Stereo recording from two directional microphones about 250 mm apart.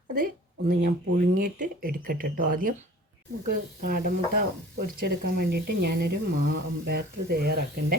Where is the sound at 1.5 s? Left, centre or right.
Right.